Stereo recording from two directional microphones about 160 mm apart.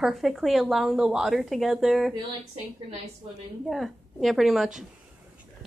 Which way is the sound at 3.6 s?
Centre (ahead or behind).